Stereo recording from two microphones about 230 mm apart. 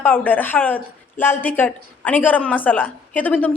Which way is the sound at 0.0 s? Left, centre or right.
Centre.